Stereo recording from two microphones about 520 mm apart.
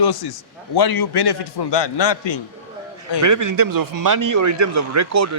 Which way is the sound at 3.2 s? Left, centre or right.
Right.